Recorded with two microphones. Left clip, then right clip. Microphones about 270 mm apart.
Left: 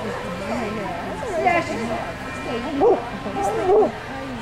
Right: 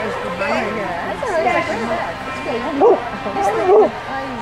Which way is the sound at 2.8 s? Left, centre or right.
Right.